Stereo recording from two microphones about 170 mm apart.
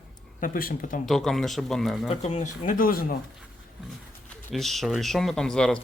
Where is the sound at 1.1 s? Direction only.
Centre (ahead or behind).